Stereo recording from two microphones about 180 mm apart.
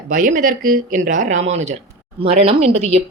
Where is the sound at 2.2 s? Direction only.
35° right (ahead or behind).